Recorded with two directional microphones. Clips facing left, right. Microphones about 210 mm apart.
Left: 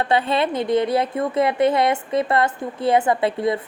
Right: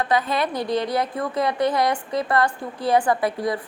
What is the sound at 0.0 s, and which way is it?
A woman's voice, 30° left (ahead or behind).